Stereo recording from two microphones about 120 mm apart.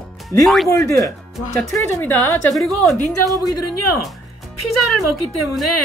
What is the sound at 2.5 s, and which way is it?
Speech, centre (ahead or behind).